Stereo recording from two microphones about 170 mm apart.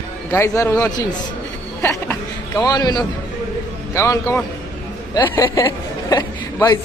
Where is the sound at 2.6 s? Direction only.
25° left (ahead or behind).